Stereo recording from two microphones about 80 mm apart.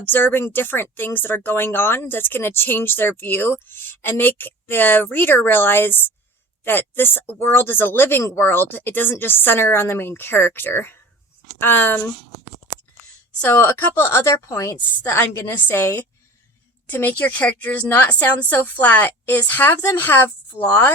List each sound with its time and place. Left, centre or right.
0.0 s speech: left
13.5 s a woman's voice: left
14.8 s speech: left